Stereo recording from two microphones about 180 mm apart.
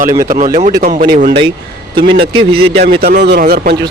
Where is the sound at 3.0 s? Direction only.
65° right (ahead or behind).